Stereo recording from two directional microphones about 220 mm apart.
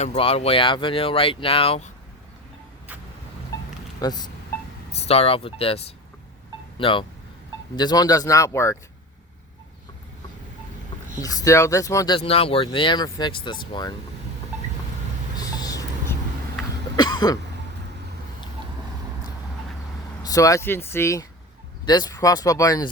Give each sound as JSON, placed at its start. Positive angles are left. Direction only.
{"t": 0.0, "sound": "speech", "side_deg": 30}
{"t": 4.0, "sound": "speech", "side_deg": 20}
{"t": 11.2, "sound": "speech", "side_deg": 15}
{"t": 15.4, "sound": "a sound", "side_deg": 15}
{"t": 17.0, "sound": "cough", "side_deg": 20}
{"t": 20.2, "sound": "speech", "side_deg": 15}